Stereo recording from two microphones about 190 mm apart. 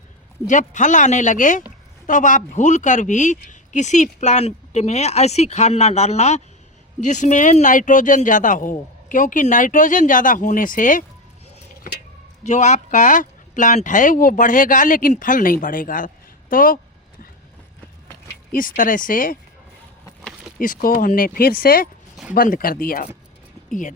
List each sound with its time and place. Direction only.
0.4 s speech: 40° left (ahead or behind)
12.4 s speech: 40° left (ahead or behind)
18.5 s speech: 45° left (ahead or behind)
20.6 s speech: 45° left (ahead or behind)